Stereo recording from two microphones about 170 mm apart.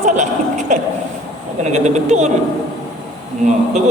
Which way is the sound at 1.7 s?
45° right (ahead or behind).